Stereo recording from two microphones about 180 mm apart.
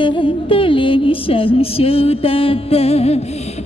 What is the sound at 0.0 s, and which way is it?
Music, 30° left (ahead or behind).